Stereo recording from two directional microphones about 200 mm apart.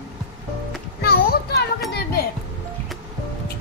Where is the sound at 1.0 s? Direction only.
50° left (ahead or behind).